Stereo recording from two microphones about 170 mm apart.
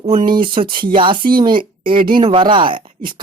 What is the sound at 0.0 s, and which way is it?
Speech, 50° right (ahead or behind).